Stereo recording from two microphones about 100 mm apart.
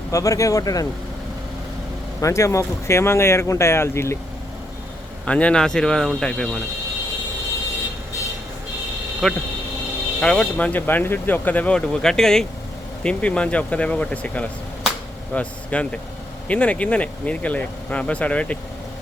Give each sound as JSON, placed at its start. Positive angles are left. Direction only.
{"t": 0.1, "sound": "speech", "side_deg": 35}
{"t": 2.2, "sound": "speech", "side_deg": 30}
{"t": 5.2, "sound": "speech", "side_deg": 10}
{"t": 9.2, "sound": "speech", "side_deg": 5}